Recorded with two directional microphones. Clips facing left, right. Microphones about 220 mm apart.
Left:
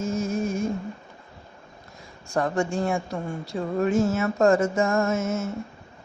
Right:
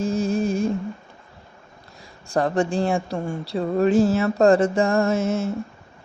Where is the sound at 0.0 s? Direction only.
30° right (ahead or behind).